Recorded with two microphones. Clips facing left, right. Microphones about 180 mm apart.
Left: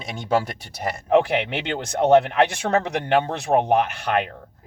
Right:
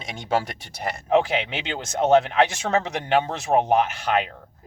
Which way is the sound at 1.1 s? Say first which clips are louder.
Left 2 dB; 60° left (ahead or behind).